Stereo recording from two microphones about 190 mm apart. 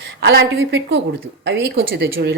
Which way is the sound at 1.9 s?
55° right (ahead or behind).